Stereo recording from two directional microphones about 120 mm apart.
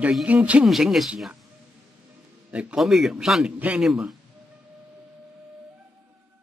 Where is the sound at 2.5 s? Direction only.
10° right (ahead or behind).